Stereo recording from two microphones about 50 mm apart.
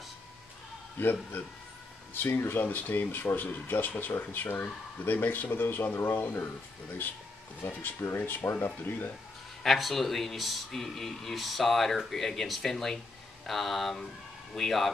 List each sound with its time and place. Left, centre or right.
1.0 s speech: left
8.0 s speech: left
8.5 s speech: left
9.6 s speech: centre